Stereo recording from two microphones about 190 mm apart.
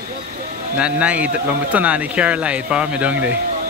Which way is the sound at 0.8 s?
5° right (ahead or behind).